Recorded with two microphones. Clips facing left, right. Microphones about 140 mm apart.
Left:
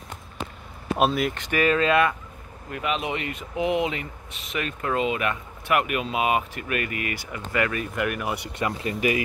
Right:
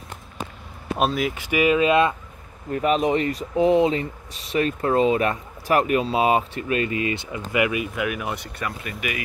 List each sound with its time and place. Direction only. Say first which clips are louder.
0.9 s speech: even; centre (ahead or behind); by 2.1 s 20° right (ahead or behind)
2.7 s speech: right 8 dB; 40° right (ahead or behind); by 8.4 s centre (ahead or behind)
8.4 s speech: left 3 dB; 25° left (ahead or behind)